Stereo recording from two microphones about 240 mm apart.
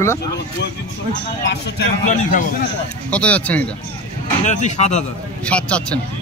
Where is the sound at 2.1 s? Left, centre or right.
Left.